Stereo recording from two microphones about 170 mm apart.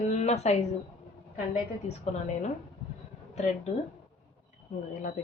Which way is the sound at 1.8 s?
40° left (ahead or behind).